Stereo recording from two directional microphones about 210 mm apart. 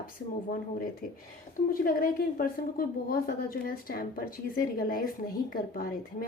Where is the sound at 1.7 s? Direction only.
40° left (ahead or behind).